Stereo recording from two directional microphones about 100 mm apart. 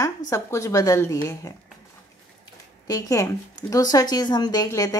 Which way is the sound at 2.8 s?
35° left (ahead or behind).